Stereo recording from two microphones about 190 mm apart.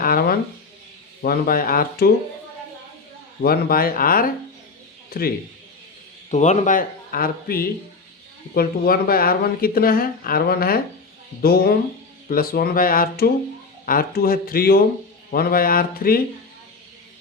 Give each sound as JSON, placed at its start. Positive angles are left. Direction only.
{"t": 0.0, "sound": "a sound", "side_deg": 50}
{"t": 1.2, "sound": "speech", "side_deg": 50}
{"t": 3.4, "sound": "speech", "side_deg": 50}
{"t": 6.3, "sound": "speech", "side_deg": 40}